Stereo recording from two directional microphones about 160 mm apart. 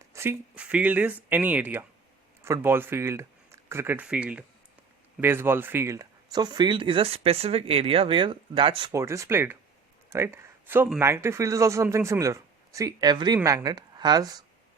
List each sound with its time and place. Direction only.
0.1 s speech: 15° right (ahead or behind); by 8.9 s 35° right (ahead or behind)
8.9 s speech: 20° right (ahead or behind)
10.1 s a sound: 15° right (ahead or behind)
11.0 s speech: 15° right (ahead or behind)